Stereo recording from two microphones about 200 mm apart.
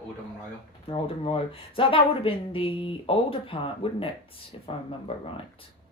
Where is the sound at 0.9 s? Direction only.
25° left (ahead or behind).